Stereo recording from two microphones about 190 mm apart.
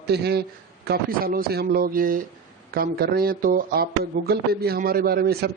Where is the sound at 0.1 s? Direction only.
60° right (ahead or behind).